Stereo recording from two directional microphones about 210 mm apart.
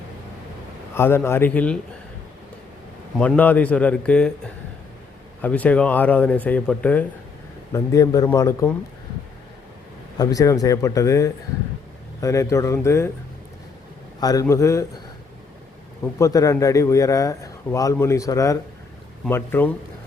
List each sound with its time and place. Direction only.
0.9 s a man's voice: 10° left (ahead or behind)
3.2 s a man's voice: 5° left (ahead or behind)
5.4 s a man's voice: 5° left (ahead or behind)
10.2 s a man's voice: 15° left (ahead or behind)
14.2 s a man's voice: 15° left (ahead or behind)
16.1 s a man's voice: 15° left (ahead or behind)